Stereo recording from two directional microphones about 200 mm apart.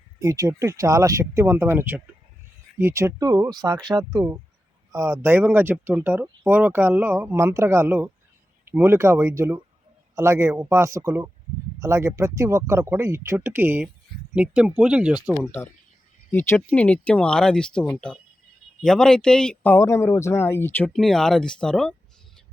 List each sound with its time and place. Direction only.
0.2 s speech: 15° right (ahead or behind)
16.3 s speech: 10° left (ahead or behind)